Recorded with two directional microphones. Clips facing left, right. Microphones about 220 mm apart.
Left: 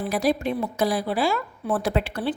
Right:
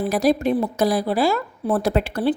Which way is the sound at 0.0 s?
40° right (ahead or behind).